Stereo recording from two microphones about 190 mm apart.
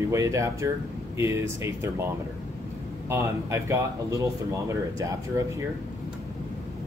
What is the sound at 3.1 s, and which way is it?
Speech, 15° right (ahead or behind).